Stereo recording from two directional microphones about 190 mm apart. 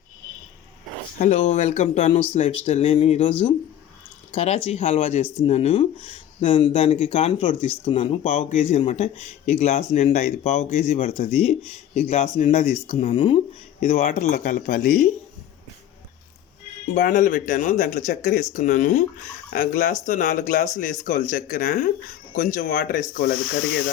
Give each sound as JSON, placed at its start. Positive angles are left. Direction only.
{"t": 1.2, "sound": "speech", "side_deg": 40}
{"t": 16.9, "sound": "speech", "side_deg": 45}